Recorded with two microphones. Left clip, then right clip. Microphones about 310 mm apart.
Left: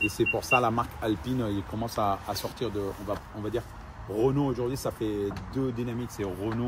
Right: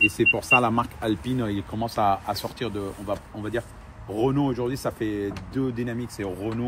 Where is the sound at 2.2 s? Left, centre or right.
Right.